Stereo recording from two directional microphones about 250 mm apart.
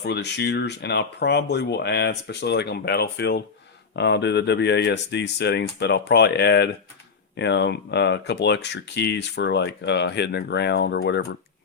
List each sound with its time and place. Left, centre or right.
0.0 s speech: left